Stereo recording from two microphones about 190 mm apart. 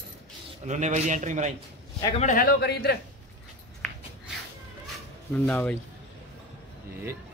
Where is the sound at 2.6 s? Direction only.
60° left (ahead or behind).